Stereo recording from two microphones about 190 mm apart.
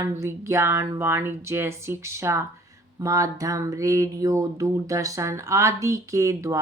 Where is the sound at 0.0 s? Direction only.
15° right (ahead or behind).